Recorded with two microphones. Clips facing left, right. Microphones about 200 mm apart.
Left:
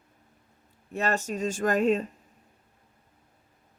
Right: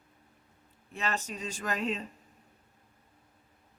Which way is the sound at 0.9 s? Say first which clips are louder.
Left 7 dB; 45° left (ahead or behind).